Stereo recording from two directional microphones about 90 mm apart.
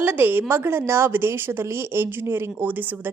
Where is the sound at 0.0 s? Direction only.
20° right (ahead or behind).